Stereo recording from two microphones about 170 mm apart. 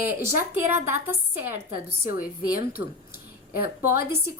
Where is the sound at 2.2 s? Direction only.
55° left (ahead or behind).